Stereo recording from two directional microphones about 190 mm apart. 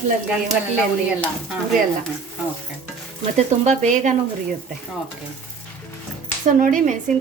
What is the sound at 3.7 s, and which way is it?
Speech, 40° right (ahead or behind).